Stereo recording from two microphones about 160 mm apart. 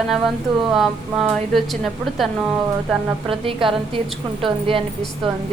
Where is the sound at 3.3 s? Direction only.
35° right (ahead or behind).